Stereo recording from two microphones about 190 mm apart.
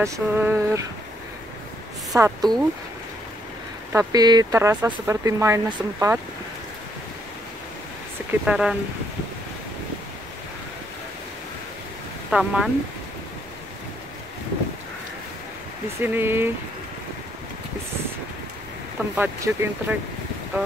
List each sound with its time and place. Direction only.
0.0 s speech: 10° right (ahead or behind)
2.1 s speech: 15° right (ahead or behind)
3.9 s speech: 15° right (ahead or behind)
8.3 s speech: 5° right (ahead or behind)
12.3 s speech: 5° right (ahead or behind)
16.0 s speech: 10° right (ahead or behind)
19.1 s speech: 10° right (ahead or behind)